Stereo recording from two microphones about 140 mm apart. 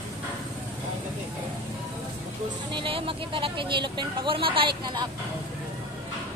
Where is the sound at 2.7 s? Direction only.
40° right (ahead or behind).